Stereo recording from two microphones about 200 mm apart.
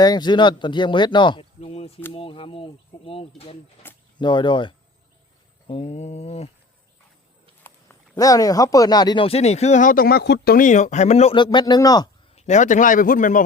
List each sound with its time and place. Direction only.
0.0 s speech: 20° left (ahead or behind)
3.9 s a sound: 10° left (ahead or behind)
4.2 s a man's voice: 25° left (ahead or behind)
8.1 s speech: 15° left (ahead or behind)
12.3 s a man's voice: 35° left (ahead or behind)